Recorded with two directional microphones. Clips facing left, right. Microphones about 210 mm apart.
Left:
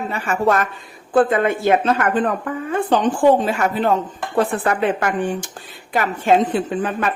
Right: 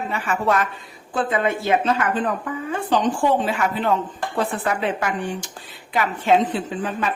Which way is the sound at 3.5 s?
45° left (ahead or behind).